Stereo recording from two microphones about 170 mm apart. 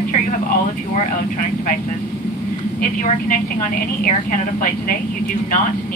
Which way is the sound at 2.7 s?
55° left (ahead or behind).